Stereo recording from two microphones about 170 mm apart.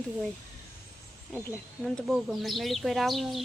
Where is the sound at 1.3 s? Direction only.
5° left (ahead or behind).